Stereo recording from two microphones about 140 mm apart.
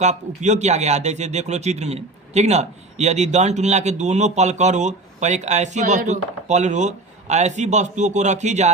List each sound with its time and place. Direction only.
0.0 s speech: 55° right (ahead or behind)